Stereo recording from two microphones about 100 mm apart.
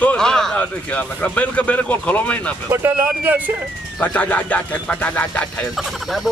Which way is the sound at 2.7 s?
25° right (ahead or behind).